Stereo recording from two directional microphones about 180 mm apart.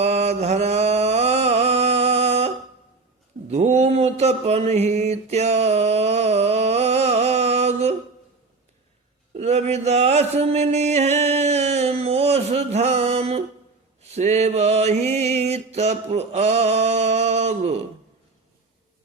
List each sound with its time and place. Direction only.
0.0 s mantra: 35° right (ahead or behind)
9.3 s mantra: 35° right (ahead or behind)